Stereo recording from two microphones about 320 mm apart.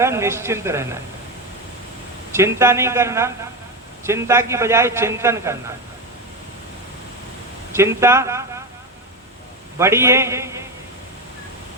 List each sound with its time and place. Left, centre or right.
0.0 s a man's voice: centre
2.3 s a man's voice: centre
7.7 s a man's voice: centre
9.7 s a man's voice: centre